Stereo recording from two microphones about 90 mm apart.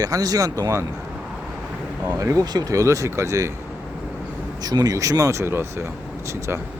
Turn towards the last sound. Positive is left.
turn(degrees=-30)  # may be behind; listen again after turning